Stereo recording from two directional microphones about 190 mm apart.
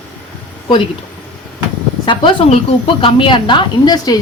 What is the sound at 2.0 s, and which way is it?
Speech, 30° left (ahead or behind).